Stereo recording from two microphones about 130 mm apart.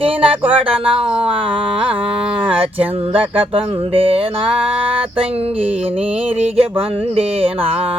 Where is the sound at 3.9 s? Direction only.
45° right (ahead or behind).